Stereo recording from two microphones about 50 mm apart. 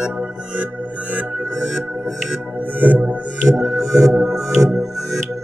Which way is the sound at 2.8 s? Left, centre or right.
Right.